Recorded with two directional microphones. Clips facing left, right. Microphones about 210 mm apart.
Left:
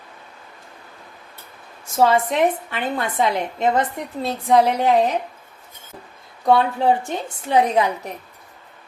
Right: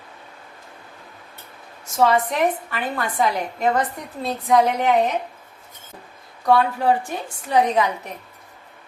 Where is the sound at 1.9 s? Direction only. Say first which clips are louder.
Left 2 dB; 30° left (ahead or behind).